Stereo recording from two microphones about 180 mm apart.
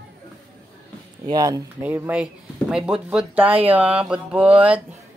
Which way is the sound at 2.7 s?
5° right (ahead or behind).